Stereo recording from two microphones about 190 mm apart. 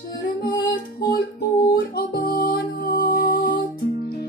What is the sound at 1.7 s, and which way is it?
Music, 55° left (ahead or behind).